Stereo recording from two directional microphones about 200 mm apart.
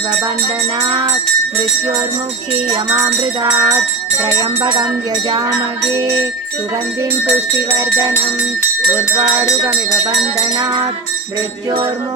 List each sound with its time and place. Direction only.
2.7 s music: 15° right (ahead or behind)
7.8 s music: 20° right (ahead or behind)